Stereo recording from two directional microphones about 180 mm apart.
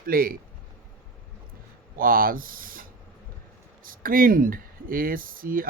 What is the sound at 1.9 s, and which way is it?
Speech, 50° right (ahead or behind).